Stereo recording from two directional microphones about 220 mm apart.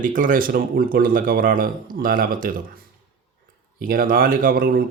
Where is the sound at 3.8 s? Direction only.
40° right (ahead or behind).